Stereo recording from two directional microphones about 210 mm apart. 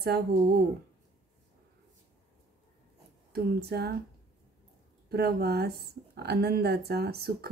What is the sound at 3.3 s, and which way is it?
Speech, 50° right (ahead or behind).